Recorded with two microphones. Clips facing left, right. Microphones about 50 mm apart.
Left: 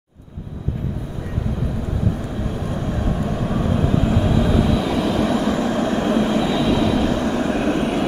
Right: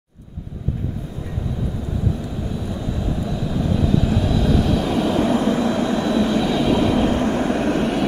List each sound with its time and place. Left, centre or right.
2.6 s vehicle: left
4.7 s vehicle: centre
5.4 s vehicle: left
6.4 s vehicle: centre
6.7 s vehicle: centre
7.0 s vehicle: right
7.4 s vehicle: left